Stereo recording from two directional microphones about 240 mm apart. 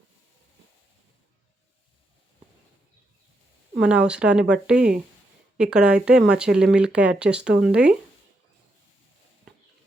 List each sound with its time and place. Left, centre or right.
3.8 s speech: centre